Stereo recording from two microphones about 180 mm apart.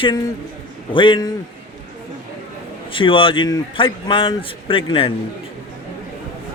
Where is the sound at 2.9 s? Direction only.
30° left (ahead or behind).